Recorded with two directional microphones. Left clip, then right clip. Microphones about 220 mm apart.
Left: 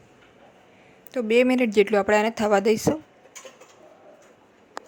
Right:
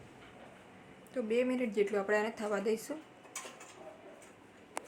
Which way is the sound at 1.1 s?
40° left (ahead or behind).